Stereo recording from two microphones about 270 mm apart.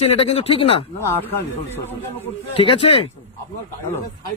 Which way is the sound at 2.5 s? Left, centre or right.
Centre.